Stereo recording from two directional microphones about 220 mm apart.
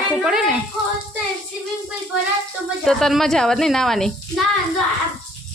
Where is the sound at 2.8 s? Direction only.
Centre (ahead or behind).